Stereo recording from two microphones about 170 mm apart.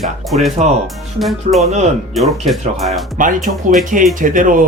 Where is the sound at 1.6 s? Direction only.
45° right (ahead or behind).